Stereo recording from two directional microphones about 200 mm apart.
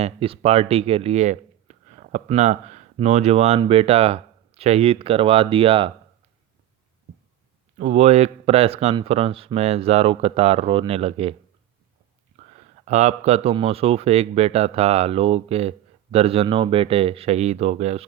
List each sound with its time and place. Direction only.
0.0 s speech: 30° right (ahead or behind)
7.8 s speech: 35° right (ahead or behind)
12.8 s speech: 35° right (ahead or behind)